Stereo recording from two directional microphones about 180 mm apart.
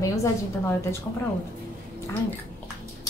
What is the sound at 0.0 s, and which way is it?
Speech, 15° left (ahead or behind).